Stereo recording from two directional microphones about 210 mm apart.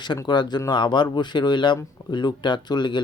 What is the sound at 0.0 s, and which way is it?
Speech, 20° left (ahead or behind).